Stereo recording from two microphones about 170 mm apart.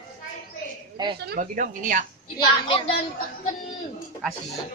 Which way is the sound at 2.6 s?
30° left (ahead or behind).